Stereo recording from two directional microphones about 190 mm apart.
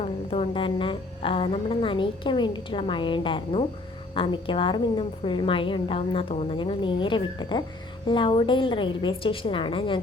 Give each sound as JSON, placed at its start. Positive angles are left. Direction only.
{"t": 0.0, "sound": "a woman's voice", "side_deg": 30}